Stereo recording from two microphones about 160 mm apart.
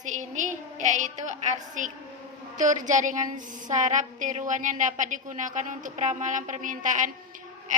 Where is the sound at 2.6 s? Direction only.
50° right (ahead or behind).